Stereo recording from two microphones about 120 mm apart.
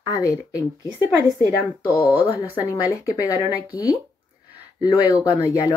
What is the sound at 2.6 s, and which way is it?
Speech, 30° left (ahead or behind).